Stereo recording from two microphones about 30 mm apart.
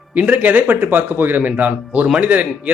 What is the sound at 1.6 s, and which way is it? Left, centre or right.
Speech, right.